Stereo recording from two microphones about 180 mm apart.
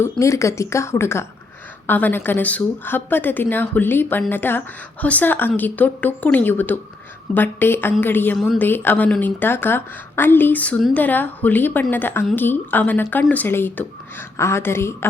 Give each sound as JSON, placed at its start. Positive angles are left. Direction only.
{"t": 0.0, "sound": "a woman's voice", "side_deg": 15}